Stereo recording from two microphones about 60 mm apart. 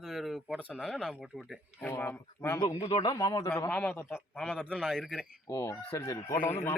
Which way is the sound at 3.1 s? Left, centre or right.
Left.